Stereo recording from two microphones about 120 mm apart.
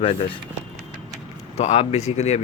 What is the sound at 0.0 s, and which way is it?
Speech, 50° left (ahead or behind).